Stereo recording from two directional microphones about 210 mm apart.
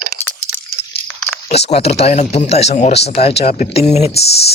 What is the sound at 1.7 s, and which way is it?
Speech, 30° left (ahead or behind).